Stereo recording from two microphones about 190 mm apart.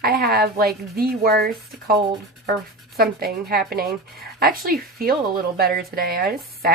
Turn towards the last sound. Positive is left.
turn(degrees=-50)  # may be behind; listen again after turning